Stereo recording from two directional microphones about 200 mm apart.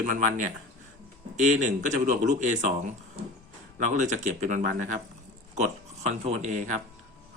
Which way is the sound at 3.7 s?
40° right (ahead or behind).